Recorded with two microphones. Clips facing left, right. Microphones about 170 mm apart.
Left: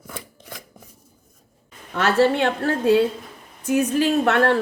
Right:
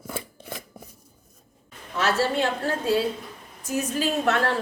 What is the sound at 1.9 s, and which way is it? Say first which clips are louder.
A woman's voice: left 5 dB; 60° left (ahead or behind).